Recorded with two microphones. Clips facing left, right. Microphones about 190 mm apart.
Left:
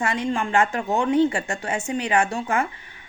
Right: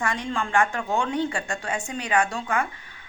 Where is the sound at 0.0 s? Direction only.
20° left (ahead or behind).